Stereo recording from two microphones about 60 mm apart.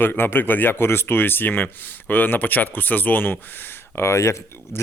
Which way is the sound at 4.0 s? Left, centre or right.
Left.